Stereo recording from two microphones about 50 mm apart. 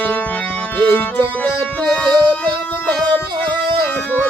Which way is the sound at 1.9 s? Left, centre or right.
Centre.